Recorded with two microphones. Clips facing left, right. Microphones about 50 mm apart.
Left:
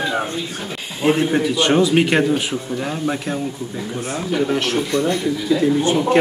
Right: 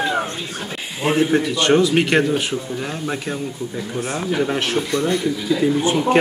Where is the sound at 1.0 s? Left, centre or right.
Centre.